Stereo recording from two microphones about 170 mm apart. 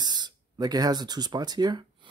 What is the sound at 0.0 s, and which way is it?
Speech, 25° right (ahead or behind).